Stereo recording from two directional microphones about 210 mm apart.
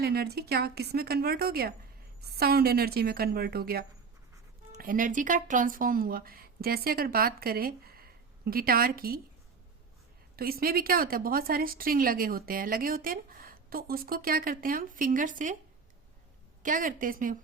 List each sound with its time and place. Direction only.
0.0 s a woman's voice: 50° right (ahead or behind)
10.3 s a woman's voice: 45° right (ahead or behind)
16.6 s a woman's voice: 40° right (ahead or behind)